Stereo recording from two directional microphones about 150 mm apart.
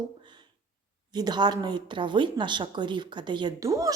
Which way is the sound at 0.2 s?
30° right (ahead or behind).